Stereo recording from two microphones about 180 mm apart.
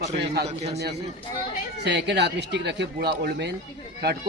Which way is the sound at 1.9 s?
70° right (ahead or behind).